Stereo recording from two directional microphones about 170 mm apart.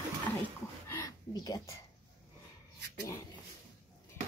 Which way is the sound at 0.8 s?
20° left (ahead or behind).